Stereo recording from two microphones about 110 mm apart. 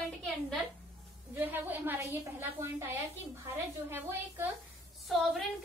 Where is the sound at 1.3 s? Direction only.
15° right (ahead or behind).